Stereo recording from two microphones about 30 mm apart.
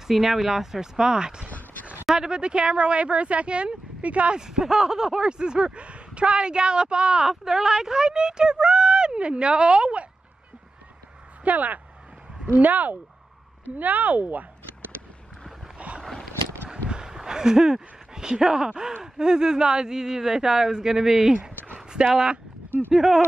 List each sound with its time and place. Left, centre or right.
0.0 s speech: centre
1.5 s a sound: left
2.1 s speech: right
4.4 s speech: centre
5.2 s speech: right
11.4 s speech: right
16.7 s a sound: right
17.0 s speech: centre
22.0 s speech: right
22.9 s speech: centre